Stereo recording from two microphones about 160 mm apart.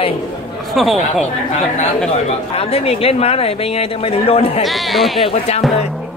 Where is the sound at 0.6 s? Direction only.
Centre (ahead or behind).